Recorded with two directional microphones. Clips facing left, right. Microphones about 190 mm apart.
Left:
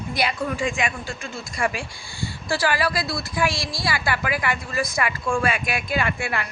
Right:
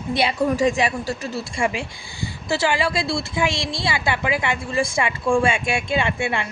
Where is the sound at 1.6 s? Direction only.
20° right (ahead or behind).